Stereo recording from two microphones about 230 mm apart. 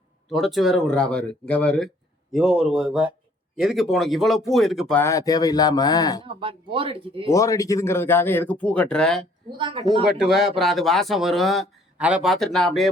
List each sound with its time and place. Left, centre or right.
0.3 s speech: centre
6.2 s speech: right
7.3 s speech: centre
9.6 s speech: right
10.1 s speech: centre